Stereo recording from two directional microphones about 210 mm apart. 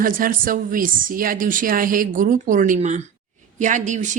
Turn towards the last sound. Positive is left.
turn(degrees=-35)  # may be behind; listen again after turning